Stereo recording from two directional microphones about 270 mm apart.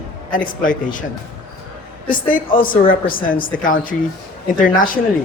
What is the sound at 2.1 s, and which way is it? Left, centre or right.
A woman's voice, left.